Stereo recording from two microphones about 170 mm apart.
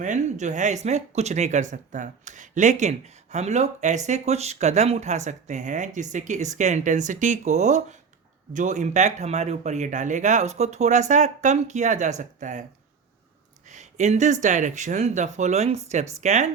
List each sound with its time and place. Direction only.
0.0 s speech: 45° right (ahead or behind)
13.7 s a sound: 45° right (ahead or behind)
14.4 s speech: 45° right (ahead or behind)